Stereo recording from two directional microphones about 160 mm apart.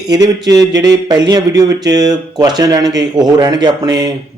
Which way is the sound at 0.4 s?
25° right (ahead or behind).